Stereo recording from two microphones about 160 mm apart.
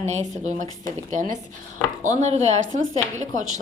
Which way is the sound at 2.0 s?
50° right (ahead or behind).